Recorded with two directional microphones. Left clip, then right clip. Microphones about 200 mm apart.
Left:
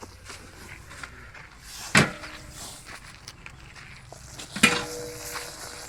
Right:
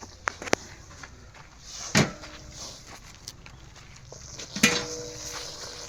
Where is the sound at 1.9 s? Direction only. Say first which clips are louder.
Left 4 dB; centre (ahead or behind).